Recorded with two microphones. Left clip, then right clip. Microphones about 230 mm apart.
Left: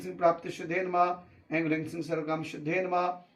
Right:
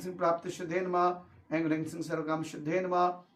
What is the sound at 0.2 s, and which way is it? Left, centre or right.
A man's voice, centre.